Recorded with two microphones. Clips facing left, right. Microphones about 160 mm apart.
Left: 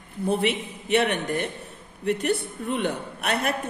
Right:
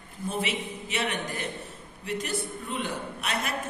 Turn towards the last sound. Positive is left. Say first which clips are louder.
# left 6 dB
turn(degrees=60)  # may be behind; listen again after turning